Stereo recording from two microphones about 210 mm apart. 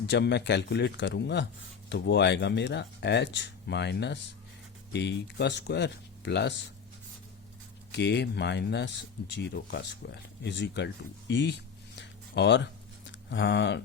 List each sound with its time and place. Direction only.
0.0 s speech: 55° left (ahead or behind)
7.9 s speech: 55° left (ahead or behind)